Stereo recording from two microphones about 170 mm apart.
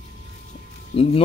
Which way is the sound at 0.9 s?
35° left (ahead or behind).